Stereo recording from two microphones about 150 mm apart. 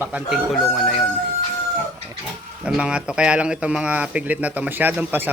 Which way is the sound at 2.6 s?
5° right (ahead or behind).